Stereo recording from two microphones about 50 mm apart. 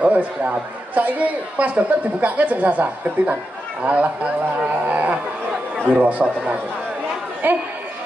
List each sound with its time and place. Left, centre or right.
0.0 s a man's voice: right
7.4 s speech: right